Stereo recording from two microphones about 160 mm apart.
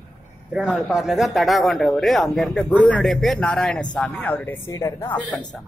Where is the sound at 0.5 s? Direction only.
5° right (ahead or behind); by 5.1 s 20° left (ahead or behind).